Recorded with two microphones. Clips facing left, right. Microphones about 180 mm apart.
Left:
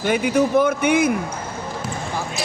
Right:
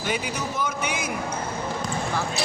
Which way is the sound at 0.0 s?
55° left (ahead or behind).